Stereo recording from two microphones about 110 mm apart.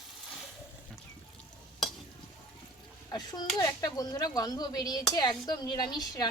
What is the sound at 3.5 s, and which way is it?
Speech, 35° left (ahead or behind).